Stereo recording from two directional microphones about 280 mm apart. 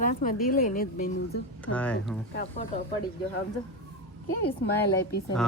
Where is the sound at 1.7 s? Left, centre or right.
Centre.